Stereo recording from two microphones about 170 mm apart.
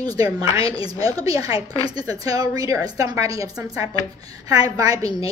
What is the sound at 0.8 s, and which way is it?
A woman's voice, 20° right (ahead or behind).